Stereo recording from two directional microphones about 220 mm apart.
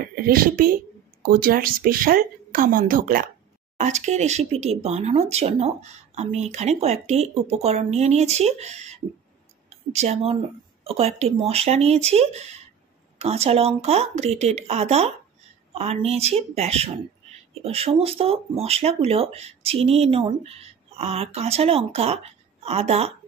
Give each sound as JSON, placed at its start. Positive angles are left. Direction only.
{"t": 0.1, "sound": "speech", "side_deg": -40}